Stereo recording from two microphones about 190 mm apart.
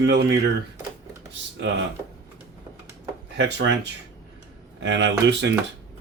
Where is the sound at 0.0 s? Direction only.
65° right (ahead or behind).